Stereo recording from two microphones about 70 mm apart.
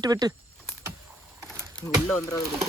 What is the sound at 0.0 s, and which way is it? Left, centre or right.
Speech, right.